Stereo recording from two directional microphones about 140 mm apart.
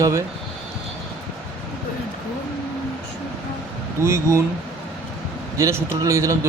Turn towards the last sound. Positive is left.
turn(degrees=-20)  # may be behind; listen again after turning